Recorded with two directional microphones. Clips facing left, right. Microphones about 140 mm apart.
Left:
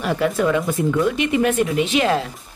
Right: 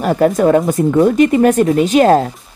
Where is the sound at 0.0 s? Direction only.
45° right (ahead or behind).